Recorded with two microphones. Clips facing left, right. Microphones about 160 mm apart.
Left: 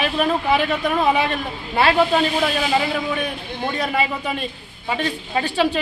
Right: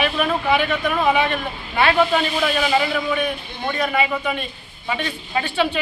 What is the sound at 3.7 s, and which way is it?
A man's voice, 35° left (ahead or behind).